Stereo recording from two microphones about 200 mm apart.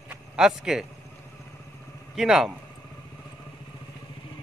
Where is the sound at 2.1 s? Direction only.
Centre (ahead or behind).